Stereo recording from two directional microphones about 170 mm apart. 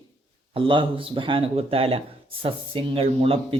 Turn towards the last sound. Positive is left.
turn(degrees=-35)  # may be behind; listen again after turning